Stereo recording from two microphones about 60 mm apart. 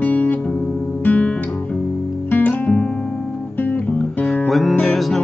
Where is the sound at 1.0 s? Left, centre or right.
Left.